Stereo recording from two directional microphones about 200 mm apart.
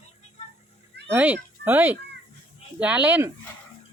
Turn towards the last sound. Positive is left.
turn(degrees=-10)  # may be behind; listen again after turning